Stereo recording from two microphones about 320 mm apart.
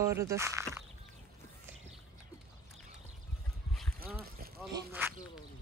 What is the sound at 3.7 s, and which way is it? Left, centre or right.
Boat, centre.